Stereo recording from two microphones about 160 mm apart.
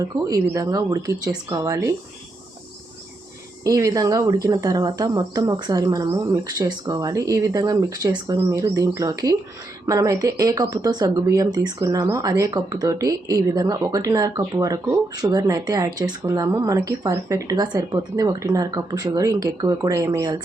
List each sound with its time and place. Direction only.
0.0 s speech: 20° right (ahead or behind)
3.6 s speech: 20° right (ahead or behind)